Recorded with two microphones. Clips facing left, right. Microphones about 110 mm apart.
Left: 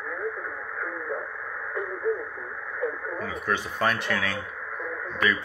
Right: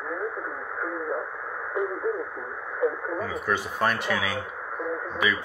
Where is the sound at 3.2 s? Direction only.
5° right (ahead or behind).